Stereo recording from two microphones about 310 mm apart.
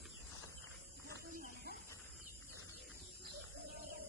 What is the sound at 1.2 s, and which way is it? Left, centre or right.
Snake, right.